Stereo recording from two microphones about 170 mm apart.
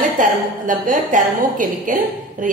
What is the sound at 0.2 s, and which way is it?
A woman's voice, 50° right (ahead or behind).